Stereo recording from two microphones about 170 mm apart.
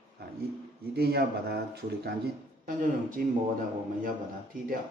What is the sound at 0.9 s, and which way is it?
Speech, 70° right (ahead or behind).